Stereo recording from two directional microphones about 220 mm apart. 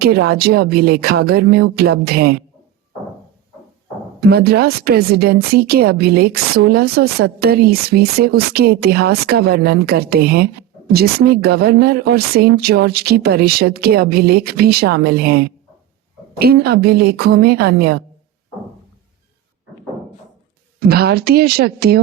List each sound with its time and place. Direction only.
0.0 s speech: 45° right (ahead or behind)
4.2 s speech: 45° right (ahead or behind)
20.7 s speech: 45° right (ahead or behind)